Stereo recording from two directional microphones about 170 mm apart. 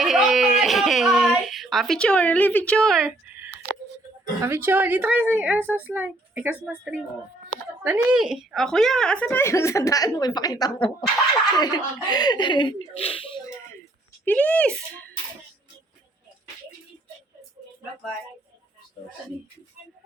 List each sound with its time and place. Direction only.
0.0 s a sound: centre (ahead or behind)
4.4 s a woman's voice: 15° right (ahead or behind); by 13.4 s 30° left (ahead or behind)
14.3 s a woman's voice: 10° left (ahead or behind)